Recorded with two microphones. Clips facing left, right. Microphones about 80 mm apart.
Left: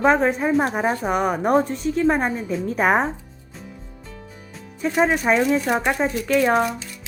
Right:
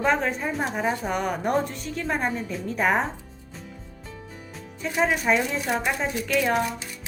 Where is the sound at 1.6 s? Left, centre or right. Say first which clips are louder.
Left 7 dB; centre.